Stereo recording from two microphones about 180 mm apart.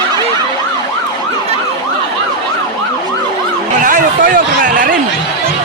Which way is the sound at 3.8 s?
45° right (ahead or behind).